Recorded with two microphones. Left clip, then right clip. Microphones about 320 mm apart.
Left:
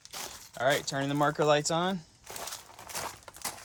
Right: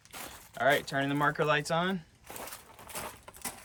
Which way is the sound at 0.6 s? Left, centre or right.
Centre.